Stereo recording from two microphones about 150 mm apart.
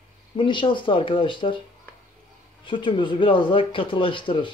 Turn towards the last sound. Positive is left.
turn(degrees=35)  # may be behind; listen again after turning